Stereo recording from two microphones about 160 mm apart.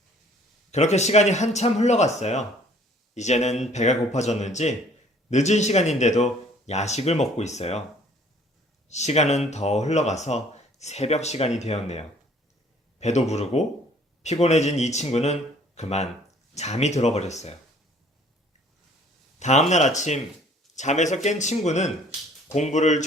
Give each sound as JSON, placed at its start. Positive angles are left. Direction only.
{"t": 0.7, "sound": "speech", "side_deg": 45}
{"t": 8.9, "sound": "speech", "side_deg": 45}
{"t": 19.4, "sound": "speech", "side_deg": 45}